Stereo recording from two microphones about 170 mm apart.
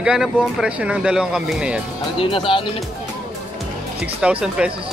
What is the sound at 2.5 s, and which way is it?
Speech, 30° left (ahead or behind).